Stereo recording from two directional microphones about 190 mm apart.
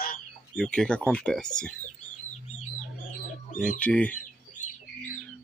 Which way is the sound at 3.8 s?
5° left (ahead or behind).